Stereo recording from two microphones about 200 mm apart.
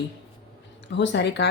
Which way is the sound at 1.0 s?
60° left (ahead or behind).